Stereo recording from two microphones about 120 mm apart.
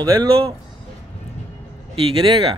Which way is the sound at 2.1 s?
40° right (ahead or behind).